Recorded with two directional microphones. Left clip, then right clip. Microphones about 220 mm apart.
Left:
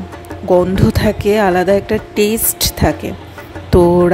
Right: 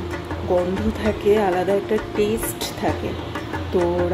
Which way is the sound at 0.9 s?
45° left (ahead or behind).